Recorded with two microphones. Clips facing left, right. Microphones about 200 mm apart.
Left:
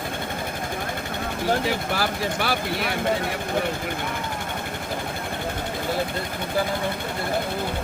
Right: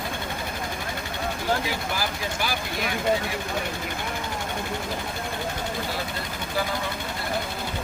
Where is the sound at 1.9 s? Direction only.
65° left (ahead or behind).